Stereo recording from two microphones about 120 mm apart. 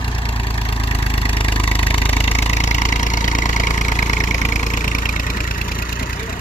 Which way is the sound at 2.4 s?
75° left (ahead or behind).